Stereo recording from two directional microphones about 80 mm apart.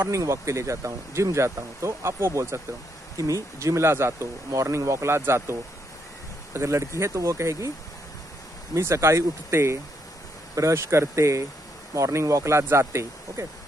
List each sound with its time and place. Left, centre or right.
0.0 s speech: right
8.7 s speech: right